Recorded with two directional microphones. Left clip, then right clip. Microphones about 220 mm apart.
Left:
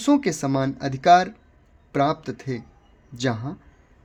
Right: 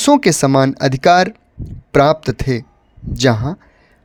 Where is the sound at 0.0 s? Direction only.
45° right (ahead or behind).